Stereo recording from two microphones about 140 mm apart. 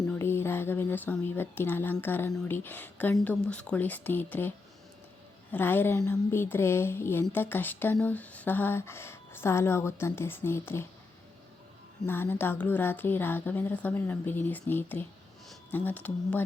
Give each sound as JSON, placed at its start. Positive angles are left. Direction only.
{"t": 0.1, "sound": "a woman's voice", "side_deg": 15}
{"t": 12.0, "sound": "a woman's voice", "side_deg": 15}